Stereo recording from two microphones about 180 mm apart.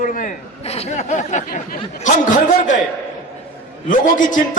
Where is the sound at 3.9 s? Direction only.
45° left (ahead or behind).